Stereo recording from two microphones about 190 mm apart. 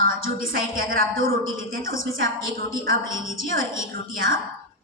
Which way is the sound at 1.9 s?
90° right.